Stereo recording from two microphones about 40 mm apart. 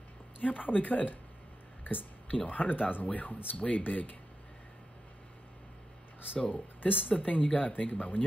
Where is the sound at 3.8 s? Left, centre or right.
Left.